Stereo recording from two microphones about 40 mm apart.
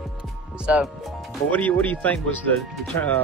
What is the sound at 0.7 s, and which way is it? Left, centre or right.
Speech, right.